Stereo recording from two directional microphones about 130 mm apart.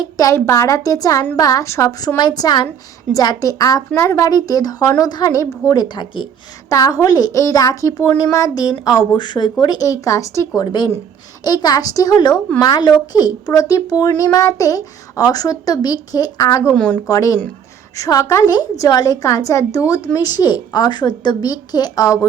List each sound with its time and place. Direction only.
0.0 s a woman's voice: 25° left (ahead or behind)
16.7 s a woman's voice: 5° left (ahead or behind)
17.1 s a woman's voice: 25° left (ahead or behind)